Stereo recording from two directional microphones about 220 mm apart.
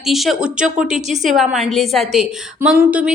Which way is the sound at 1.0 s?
30° right (ahead or behind).